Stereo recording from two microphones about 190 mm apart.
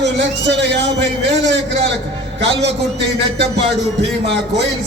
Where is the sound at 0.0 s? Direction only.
65° right (ahead or behind).